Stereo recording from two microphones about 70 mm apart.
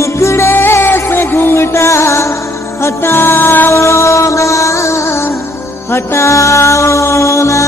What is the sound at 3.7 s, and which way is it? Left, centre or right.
Music, left.